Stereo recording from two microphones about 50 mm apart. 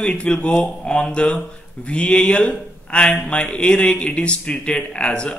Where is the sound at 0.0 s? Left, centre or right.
Left.